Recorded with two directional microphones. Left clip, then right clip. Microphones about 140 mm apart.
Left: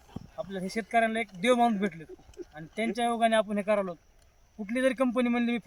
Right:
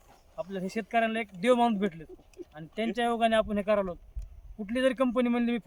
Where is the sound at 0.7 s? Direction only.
25° right (ahead or behind).